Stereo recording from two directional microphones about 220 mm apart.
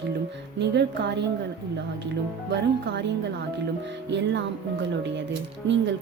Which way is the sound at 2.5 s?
50° right (ahead or behind).